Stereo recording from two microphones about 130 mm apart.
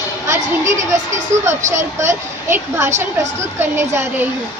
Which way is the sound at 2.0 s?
20° right (ahead or behind).